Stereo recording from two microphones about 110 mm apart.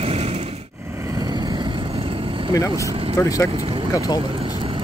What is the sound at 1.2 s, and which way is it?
Vehicle, 40° right (ahead or behind).